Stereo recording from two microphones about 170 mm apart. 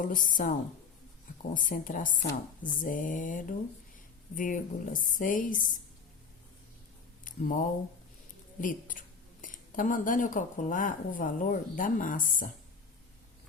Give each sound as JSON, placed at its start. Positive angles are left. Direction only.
{"t": 0.0, "sound": "speech", "side_deg": 50}
{"t": 7.3, "sound": "speech", "side_deg": 50}